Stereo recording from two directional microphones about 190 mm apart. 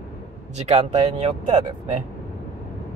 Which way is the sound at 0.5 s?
35° right (ahead or behind).